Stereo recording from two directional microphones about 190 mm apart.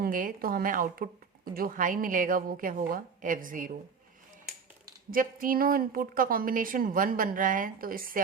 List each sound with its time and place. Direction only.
0.0 s a woman's voice: 45° right (ahead or behind)
5.1 s a woman's voice: 45° right (ahead or behind)